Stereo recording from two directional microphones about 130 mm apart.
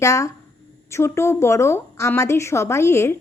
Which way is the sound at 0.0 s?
25° left (ahead or behind).